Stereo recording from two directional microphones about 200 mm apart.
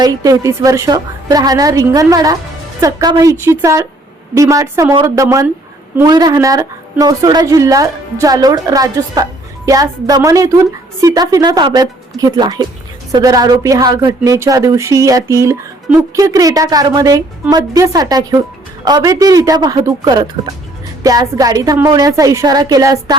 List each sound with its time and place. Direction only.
0.0 s a woman's voice: 15° right (ahead or behind)